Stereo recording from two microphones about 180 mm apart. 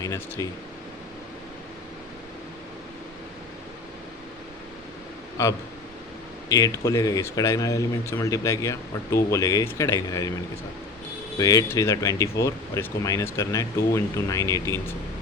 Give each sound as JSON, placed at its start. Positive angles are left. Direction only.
{"t": 0.0, "sound": "speech", "side_deg": 20}
{"t": 6.5, "sound": "speech", "side_deg": 20}
{"t": 11.3, "sound": "speech", "side_deg": 20}